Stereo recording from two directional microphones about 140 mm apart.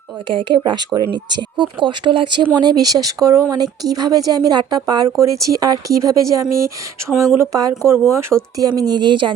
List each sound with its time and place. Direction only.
0.3 s speech: 35° right (ahead or behind)